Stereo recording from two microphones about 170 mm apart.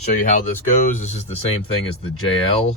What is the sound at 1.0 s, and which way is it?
Speech, 40° left (ahead or behind).